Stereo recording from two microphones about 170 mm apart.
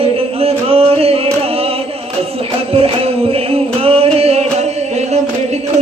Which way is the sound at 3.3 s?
35° right (ahead or behind).